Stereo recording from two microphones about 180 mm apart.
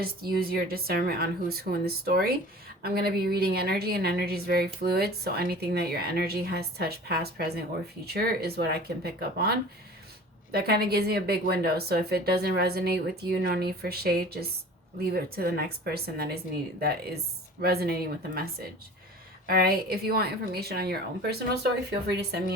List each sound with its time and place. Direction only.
0.0 s a woman's voice: 55° right (ahead or behind)